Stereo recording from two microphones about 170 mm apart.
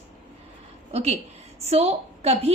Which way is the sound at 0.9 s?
35° right (ahead or behind).